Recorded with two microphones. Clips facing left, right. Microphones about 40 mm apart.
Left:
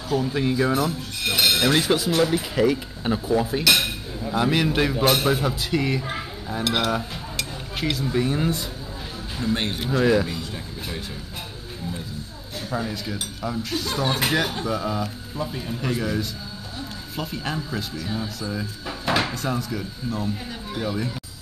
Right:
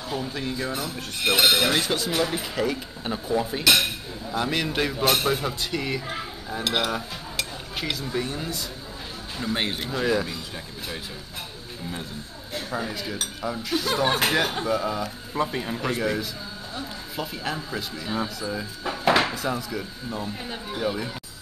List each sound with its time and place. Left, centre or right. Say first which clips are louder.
0.2 s speech: left 7 dB; centre
1.2 s speech: right 2 dB; centre
1.6 s a man's voice: left 3 dB; centre
6.0 s dishes: left 2 dB; centre
6.6 s music: left 2 dB; centre
8.0 s a man's voice: left 7 dB; centre
8.3 s speech: left 7 dB; left
9.4 s speech: left 2 dB; centre
9.8 s speech: left 8 dB; centre
12.7 s speech: left 2 dB; centre
15.4 s a man's voice: right 2 dB; right
16.0 s a man's voice: even; centre